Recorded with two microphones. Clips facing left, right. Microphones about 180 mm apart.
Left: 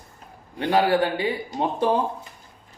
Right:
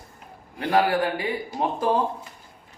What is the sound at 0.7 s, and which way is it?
Speech, 25° left (ahead or behind).